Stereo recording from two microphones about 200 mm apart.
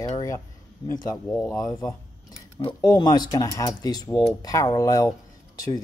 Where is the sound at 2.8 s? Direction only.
20° left (ahead or behind).